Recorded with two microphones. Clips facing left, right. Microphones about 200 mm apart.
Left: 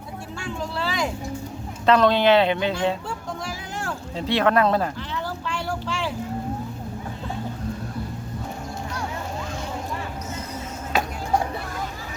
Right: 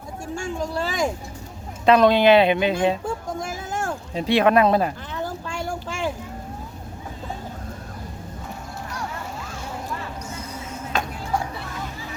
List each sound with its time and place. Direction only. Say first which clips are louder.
0.3 s speech: right 3 dB; 45° right (ahead or behind)
1.9 s speech: right 2 dB; 15° right (ahead or behind)
3.1 s vehicle: right 3 dB; 50° right (ahead or behind)
4.1 s speech: right 3 dB; 15° right (ahead or behind)
5.1 s a sound: even; 50° right (ahead or behind)